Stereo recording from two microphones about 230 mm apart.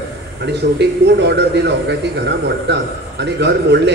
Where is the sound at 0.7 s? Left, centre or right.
Right.